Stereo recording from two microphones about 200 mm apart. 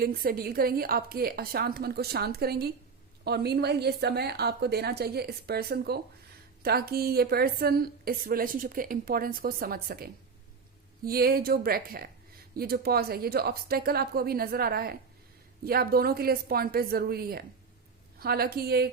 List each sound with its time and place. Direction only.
0.0 s a woman's voice: 50° right (ahead or behind)